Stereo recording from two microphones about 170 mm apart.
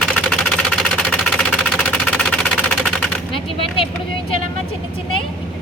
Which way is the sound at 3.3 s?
30° left (ahead or behind).